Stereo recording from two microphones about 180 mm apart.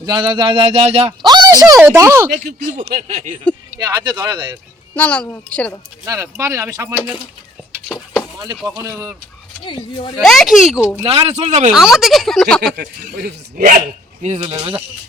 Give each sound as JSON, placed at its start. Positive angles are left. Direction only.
{"t": 0.0, "sound": "speech", "side_deg": -25}
{"t": 2.5, "sound": "speech", "side_deg": -40}
{"t": 2.9, "sound": "a sound", "side_deg": -50}
{"t": 3.8, "sound": "speech", "side_deg": -25}
{"t": 4.9, "sound": "a woman's voice", "side_deg": 10}
{"t": 6.1, "sound": "speech", "side_deg": -15}
{"t": 8.6, "sound": "speech", "side_deg": -20}
{"t": 9.6, "sound": "speech", "side_deg": 25}
{"t": 10.2, "sound": "speech", "side_deg": 0}
{"t": 11.0, "sound": "speech", "side_deg": -35}
{"t": 11.7, "sound": "speech", "side_deg": -5}
{"t": 12.6, "sound": "speech", "side_deg": -60}
{"t": 14.2, "sound": "speech", "side_deg": -40}
{"t": 14.4, "sound": "speech", "side_deg": -30}